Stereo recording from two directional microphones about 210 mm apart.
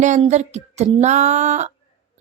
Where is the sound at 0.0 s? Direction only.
35° right (ahead or behind).